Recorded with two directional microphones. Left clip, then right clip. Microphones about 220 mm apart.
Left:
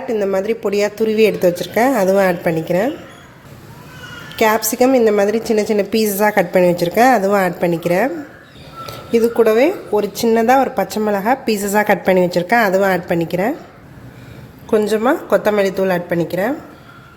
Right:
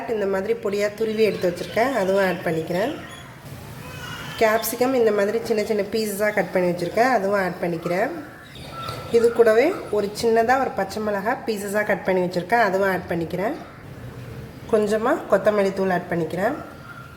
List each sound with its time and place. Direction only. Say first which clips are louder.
0.1 s a woman's voice: left 6 dB; 30° left (ahead or behind)
4.4 s a woman's voice: left 6 dB; 35° left (ahead or behind)
9.1 s a woman's voice: left 3 dB; 30° left (ahead or behind)
14.7 s a woman's voice: left 5 dB; 35° left (ahead or behind)